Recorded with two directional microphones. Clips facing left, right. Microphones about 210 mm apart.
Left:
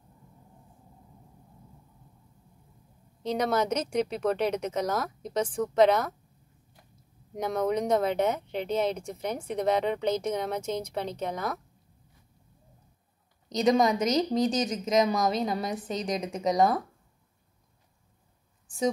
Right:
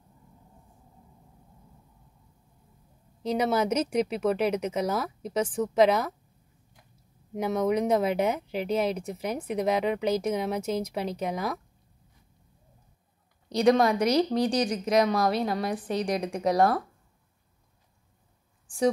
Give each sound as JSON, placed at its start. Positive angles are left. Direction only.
{"t": 3.3, "sound": "speech", "side_deg": -10}
{"t": 7.3, "sound": "speech", "side_deg": -5}
{"t": 13.5, "sound": "a woman's voice", "side_deg": 20}
{"t": 13.7, "sound": "a woman's voice", "side_deg": 0}
{"t": 14.4, "sound": "speech", "side_deg": 20}
{"t": 14.9, "sound": "a woman's voice", "side_deg": 0}